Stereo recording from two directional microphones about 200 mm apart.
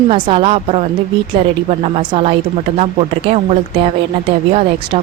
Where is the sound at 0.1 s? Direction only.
30° right (ahead or behind).